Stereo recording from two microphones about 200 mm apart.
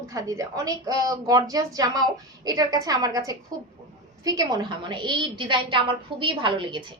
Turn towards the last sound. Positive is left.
turn(degrees=-25)  # may be behind; listen again after turning